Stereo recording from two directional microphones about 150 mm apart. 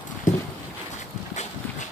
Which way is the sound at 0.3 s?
55° left (ahead or behind).